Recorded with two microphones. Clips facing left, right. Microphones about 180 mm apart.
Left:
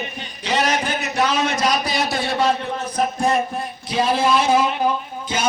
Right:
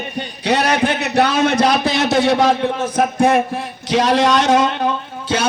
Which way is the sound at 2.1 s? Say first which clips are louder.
Right 7 dB; 85° right.